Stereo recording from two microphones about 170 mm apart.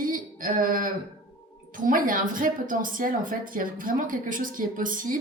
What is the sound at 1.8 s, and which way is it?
Speech, 55° right (ahead or behind).